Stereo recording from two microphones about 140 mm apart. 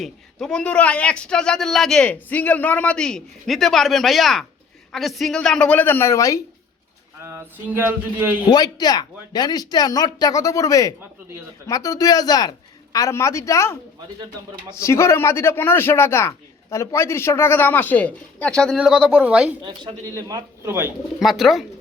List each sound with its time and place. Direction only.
0.0 s a man's voice: 5° left (ahead or behind); by 6.4 s 20° left (ahead or behind)
7.2 s a sound: 20° right (ahead or behind)
8.4 s speech: 30° left (ahead or behind); by 18.8 s 5° left (ahead or behind)
18.8 s a sound: 5° right (ahead or behind)
19.6 s a man's voice: 30° right (ahead or behind)
21.2 s a man's voice: centre (ahead or behind)